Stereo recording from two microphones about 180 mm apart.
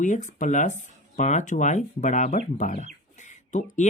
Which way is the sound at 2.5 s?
40° left (ahead or behind).